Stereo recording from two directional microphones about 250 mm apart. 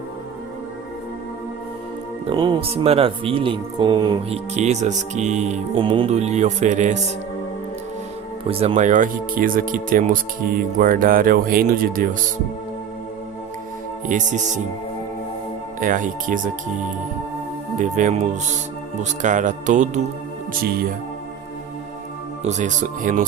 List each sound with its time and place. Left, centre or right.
2.2 s speech: centre
8.4 s speech: right
14.1 s speech: right
15.8 s speech: right
17.7 s speech: right
22.4 s speech: right